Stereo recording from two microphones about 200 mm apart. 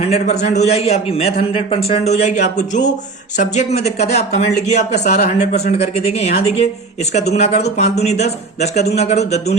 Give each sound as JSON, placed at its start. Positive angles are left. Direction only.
{"t": 0.0, "sound": "a man's voice", "side_deg": 35}